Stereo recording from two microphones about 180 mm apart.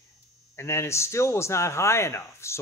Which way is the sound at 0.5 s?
15° left (ahead or behind).